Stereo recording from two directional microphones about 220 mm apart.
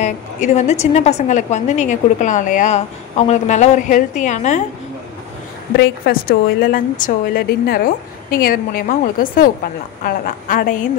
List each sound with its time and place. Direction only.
0.0 s a woman's voice: 30° left (ahead or behind)
5.8 s a woman's voice: 40° left (ahead or behind)